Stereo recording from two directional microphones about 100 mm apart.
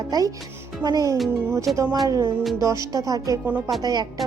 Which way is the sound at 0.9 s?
40° right (ahead or behind).